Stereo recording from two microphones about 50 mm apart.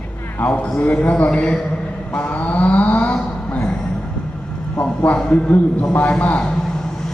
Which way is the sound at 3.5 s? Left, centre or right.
Left.